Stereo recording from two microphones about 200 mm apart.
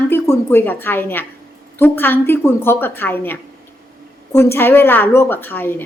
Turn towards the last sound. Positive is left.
turn(degrees=10)  # may be behind; listen again after turning